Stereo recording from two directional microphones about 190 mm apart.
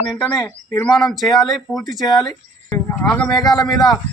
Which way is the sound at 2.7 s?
10° left (ahead or behind).